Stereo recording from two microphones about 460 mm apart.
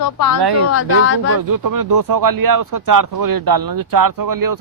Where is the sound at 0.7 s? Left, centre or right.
Left.